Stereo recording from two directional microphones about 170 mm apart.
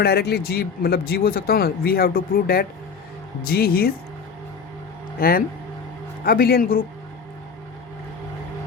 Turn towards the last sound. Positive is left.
turn(degrees=60)  # may be behind; listen again after turning